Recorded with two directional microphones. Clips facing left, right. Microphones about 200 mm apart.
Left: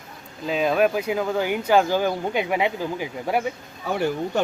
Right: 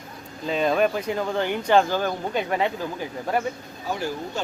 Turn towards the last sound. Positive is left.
turn(degrees=65)  # may be behind; listen again after turning